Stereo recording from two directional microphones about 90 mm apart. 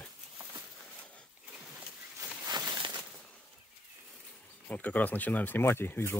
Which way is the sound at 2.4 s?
45° right (ahead or behind).